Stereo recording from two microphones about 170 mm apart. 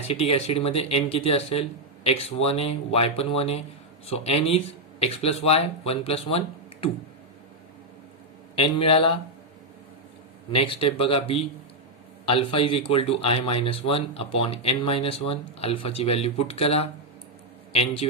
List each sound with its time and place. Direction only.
0.1 s a man's voice: 35° left (ahead or behind)
8.5 s a man's voice: 30° left (ahead or behind)
10.5 s a man's voice: 35° left (ahead or behind)